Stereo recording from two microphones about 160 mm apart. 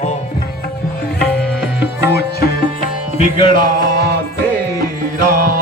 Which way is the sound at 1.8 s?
90° left.